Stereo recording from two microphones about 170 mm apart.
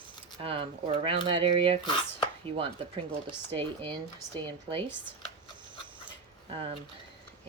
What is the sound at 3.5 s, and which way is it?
A woman's voice, 35° right (ahead or behind).